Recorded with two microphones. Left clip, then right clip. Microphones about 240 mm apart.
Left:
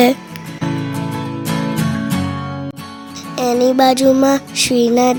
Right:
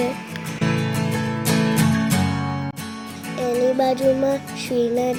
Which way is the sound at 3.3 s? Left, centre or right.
Left.